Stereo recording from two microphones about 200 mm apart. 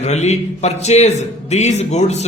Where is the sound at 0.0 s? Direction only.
35° left (ahead or behind).